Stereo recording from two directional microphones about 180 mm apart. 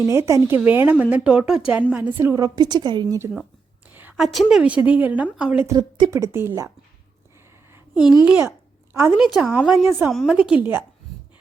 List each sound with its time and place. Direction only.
0.1 s a woman's voice: 15° right (ahead or behind)
3.9 s a sound: 10° right (ahead or behind)
4.3 s a woman's voice: centre (ahead or behind)
5.6 s a woman's voice: 20° right (ahead or behind)
7.7 s a sound: 5° right (ahead or behind)
8.2 s a woman's voice: 10° right (ahead or behind)